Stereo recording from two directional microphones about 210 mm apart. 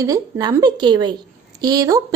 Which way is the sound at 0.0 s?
15° right (ahead or behind).